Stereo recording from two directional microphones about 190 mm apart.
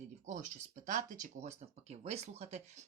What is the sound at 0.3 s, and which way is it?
Speech, 40° right (ahead or behind).